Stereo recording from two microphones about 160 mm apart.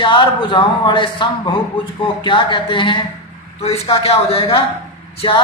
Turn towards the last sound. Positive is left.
turn(degrees=35)  # may be behind; listen again after turning